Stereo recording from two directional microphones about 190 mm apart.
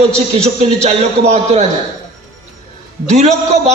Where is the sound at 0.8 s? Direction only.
35° right (ahead or behind).